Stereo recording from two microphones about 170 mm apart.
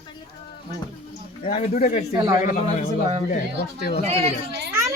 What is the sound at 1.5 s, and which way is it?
Speech, 35° left (ahead or behind).